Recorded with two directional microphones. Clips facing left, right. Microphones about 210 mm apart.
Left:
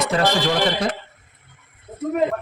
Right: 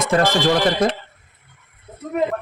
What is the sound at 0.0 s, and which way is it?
Speech, 50° right (ahead or behind).